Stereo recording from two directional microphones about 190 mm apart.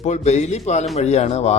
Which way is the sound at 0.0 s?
35° left (ahead or behind).